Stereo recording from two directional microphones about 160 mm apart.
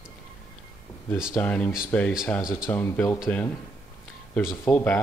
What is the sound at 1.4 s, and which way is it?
Speech, 5° left (ahead or behind).